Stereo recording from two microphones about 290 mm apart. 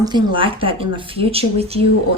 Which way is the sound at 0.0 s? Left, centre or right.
Centre.